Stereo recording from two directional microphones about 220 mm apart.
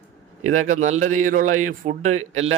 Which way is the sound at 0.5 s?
35° right (ahead or behind).